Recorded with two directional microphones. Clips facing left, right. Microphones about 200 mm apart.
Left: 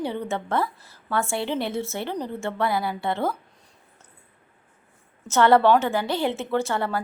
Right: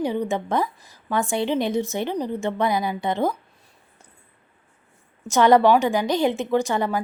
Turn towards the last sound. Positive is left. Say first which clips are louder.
# right 3 dB
turn(degrees=-15)  # may be behind; listen again after turning